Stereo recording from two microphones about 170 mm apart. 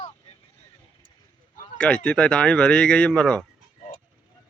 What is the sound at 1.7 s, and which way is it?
Speech, 5° left (ahead or behind).